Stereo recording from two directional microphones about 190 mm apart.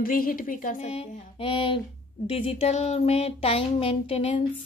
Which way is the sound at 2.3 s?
30° left (ahead or behind).